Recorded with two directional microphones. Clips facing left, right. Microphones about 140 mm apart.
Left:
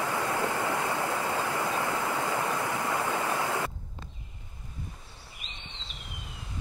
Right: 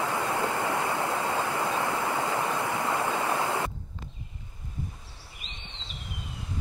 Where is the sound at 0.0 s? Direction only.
25° right (ahead or behind).